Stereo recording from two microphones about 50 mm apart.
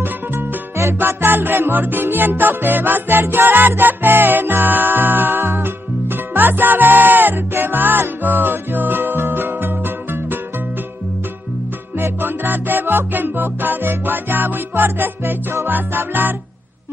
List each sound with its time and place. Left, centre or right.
0.0 s music: right
12.0 s music: right